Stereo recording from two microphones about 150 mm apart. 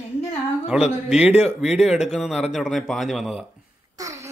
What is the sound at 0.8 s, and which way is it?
Speech, 45° left (ahead or behind).